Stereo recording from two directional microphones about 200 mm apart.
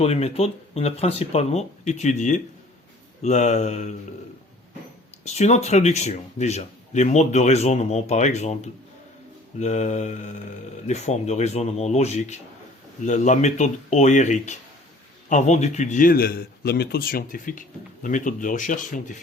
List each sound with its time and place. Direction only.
0.0 s speech: 30° left (ahead or behind)
5.2 s a man's voice: 35° left (ahead or behind)